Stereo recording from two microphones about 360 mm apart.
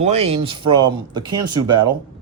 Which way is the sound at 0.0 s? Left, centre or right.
Centre.